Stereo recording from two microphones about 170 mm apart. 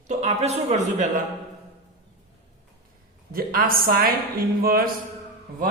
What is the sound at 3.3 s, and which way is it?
A man's voice, 60° right (ahead or behind).